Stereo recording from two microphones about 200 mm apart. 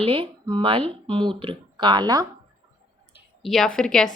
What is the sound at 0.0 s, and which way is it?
Speech, 25° right (ahead or behind).